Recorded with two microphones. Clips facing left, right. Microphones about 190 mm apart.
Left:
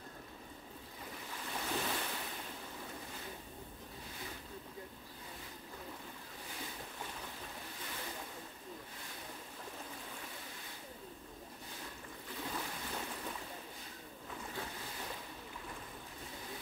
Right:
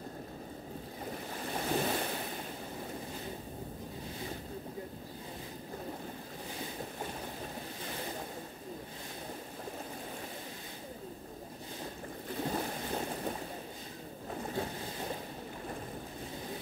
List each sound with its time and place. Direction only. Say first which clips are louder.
1.0 s waves: right 7 dB; 40° right (ahead or behind)
11.8 s boat: right 10 dB; 40° right (ahead or behind)